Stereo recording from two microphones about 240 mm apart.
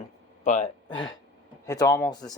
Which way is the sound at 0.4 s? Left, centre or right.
Left.